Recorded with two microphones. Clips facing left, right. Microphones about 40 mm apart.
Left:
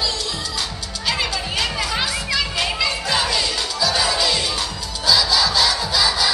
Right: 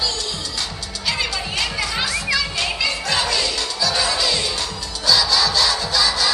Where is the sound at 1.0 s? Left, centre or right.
Centre.